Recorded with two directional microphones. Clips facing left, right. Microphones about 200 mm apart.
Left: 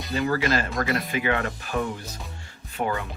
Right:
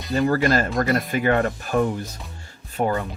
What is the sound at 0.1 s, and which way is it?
Speech, 45° right (ahead or behind).